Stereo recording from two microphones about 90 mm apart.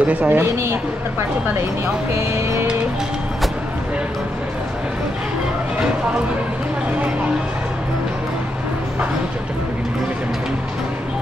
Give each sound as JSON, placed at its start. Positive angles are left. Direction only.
{"t": 0.0, "sound": "a woman's voice", "side_deg": -15}